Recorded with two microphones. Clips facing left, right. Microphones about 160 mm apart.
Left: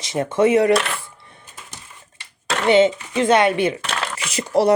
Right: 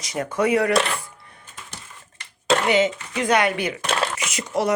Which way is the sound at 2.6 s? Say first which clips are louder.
Left 5 dB; 30° left (ahead or behind).